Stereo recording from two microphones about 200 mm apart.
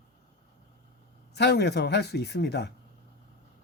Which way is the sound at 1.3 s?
55° left (ahead or behind).